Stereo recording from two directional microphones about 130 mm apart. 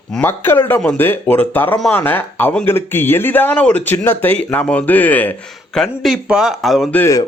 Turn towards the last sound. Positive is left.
turn(degrees=15)  # may be behind; listen again after turning